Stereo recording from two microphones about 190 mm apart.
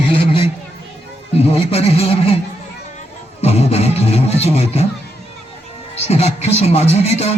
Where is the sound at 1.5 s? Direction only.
30° left (ahead or behind).